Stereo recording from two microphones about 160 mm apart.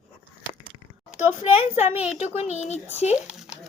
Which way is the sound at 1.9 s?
10° right (ahead or behind).